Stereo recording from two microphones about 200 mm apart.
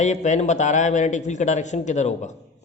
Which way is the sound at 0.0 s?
35° left (ahead or behind).